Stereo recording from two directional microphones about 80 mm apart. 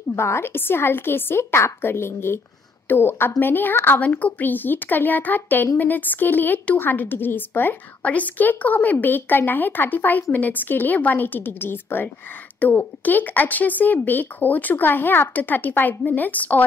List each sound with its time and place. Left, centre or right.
0.1 s a woman's voice: left